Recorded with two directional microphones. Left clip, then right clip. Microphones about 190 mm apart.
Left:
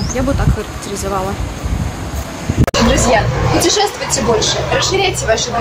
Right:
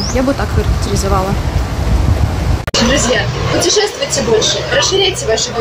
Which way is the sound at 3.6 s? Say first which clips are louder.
Right 2 dB; 25° left (ahead or behind).